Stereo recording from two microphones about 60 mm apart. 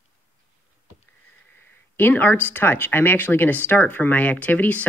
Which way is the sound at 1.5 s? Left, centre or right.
Left.